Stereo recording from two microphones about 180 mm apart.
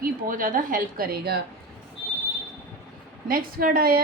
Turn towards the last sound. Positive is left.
turn(degrees=-55)  # may be behind; listen again after turning